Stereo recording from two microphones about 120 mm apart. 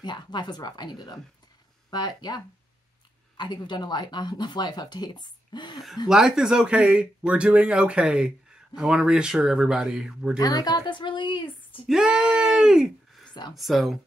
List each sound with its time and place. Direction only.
0.0 s speech: 40° left (ahead or behind)
6.0 s speech: 5° right (ahead or behind)
10.4 s speech: 35° left (ahead or behind)
11.9 s a sound: 5° right (ahead or behind)